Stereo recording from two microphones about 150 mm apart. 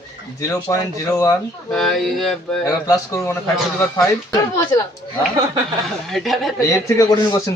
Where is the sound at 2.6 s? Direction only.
20° left (ahead or behind).